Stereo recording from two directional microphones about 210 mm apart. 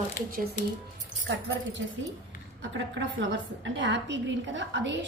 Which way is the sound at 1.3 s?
55° right (ahead or behind).